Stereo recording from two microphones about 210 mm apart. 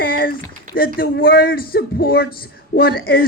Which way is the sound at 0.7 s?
45° left (ahead or behind).